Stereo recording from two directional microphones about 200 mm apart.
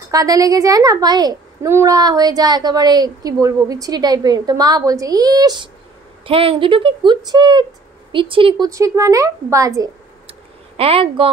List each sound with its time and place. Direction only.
0.1 s a woman's voice: 15° right (ahead or behind)
8.6 s speech: 15° right (ahead or behind)
10.8 s a woman's voice: 30° right (ahead or behind)